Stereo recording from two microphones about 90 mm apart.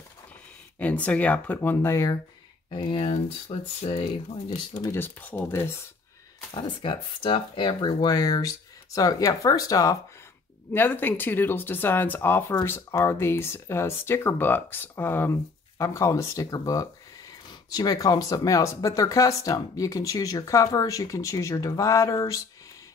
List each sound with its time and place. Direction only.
0.7 s speech: 15° left (ahead or behind); by 2.1 s 30° left (ahead or behind)
2.7 s speech: 60° left (ahead or behind); by 4.6 s 75° left (ahead or behind)
4.9 s speech: 25° left (ahead or behind)
6.5 s speech: 60° left (ahead or behind); by 9.9 s 40° left (ahead or behind)
10.7 s speech: 20° left (ahead or behind)
15.8 s speech: 35° left (ahead or behind)